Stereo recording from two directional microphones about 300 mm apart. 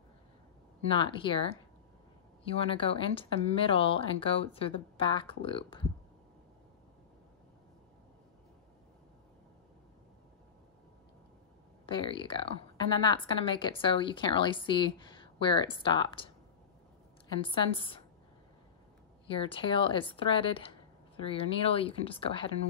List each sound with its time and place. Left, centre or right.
0.8 s a woman's voice: centre
11.8 s a woman's voice: centre
17.3 s a woman's voice: centre
19.2 s a woman's voice: centre